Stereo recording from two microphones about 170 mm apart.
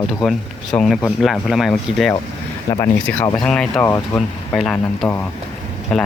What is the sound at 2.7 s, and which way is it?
Speech, 15° left (ahead or behind).